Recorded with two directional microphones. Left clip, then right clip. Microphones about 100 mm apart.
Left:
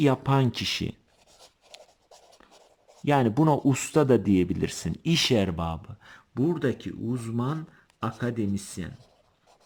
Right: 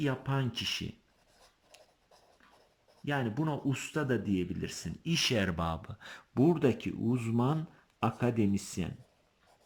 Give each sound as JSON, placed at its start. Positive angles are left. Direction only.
{"t": 0.0, "sound": "speech", "side_deg": 50}
{"t": 1.7, "sound": "writing", "side_deg": 45}
{"t": 3.0, "sound": "speech", "side_deg": 55}
{"t": 5.4, "sound": "speech", "side_deg": 30}
{"t": 5.6, "sound": "speech", "side_deg": 15}
{"t": 6.0, "sound": "speech", "side_deg": 0}
{"t": 6.4, "sound": "speech", "side_deg": -10}